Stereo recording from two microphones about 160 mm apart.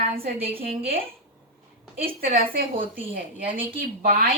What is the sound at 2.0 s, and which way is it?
A woman's voice, 65° right (ahead or behind).